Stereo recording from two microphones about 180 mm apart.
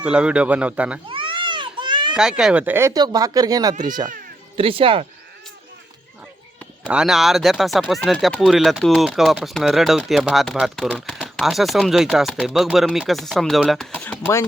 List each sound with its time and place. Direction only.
0.0 s speech: 5° right (ahead or behind)
1.1 s a sound: 30° right (ahead or behind)
2.1 s speech: 5° right (ahead or behind); by 5.0 s 30° right (ahead or behind)
6.8 s speech: 5° right (ahead or behind)